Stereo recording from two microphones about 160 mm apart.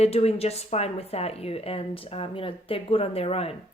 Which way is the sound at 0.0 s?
40° left (ahead or behind).